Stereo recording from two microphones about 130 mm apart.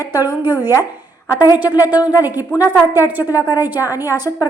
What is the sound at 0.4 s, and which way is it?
A woman's voice, 15° right (ahead or behind).